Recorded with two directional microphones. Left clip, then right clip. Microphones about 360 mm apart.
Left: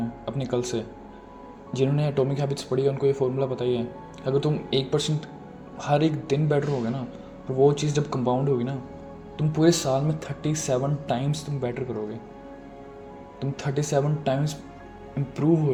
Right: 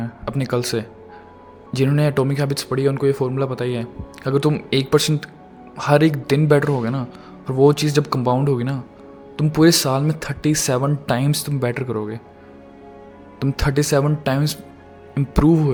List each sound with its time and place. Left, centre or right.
0.3 s speech: right
13.4 s speech: right